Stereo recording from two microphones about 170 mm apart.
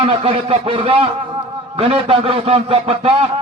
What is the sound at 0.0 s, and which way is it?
A man's voice, 35° right (ahead or behind).